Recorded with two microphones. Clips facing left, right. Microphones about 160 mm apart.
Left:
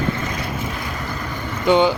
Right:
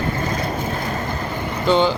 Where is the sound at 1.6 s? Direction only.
15° left (ahead or behind).